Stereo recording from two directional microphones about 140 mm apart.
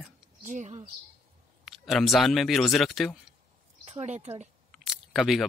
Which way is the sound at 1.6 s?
Centre (ahead or behind).